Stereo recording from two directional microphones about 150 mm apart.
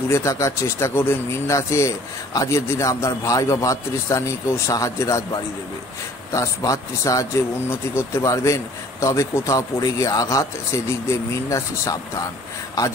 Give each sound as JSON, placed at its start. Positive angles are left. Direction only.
{"t": 0.1, "sound": "speech", "side_deg": 20}